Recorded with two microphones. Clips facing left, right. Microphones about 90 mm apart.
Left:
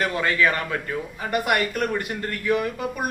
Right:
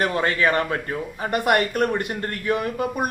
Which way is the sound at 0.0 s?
35° right (ahead or behind).